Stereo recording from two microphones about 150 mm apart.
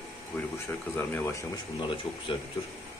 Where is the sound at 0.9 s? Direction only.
15° left (ahead or behind).